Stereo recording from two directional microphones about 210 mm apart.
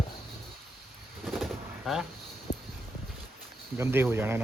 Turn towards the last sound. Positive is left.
turn(degrees=-10)  # may be behind; listen again after turning